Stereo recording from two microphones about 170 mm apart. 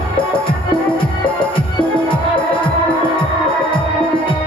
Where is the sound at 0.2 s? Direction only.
30° left (ahead or behind).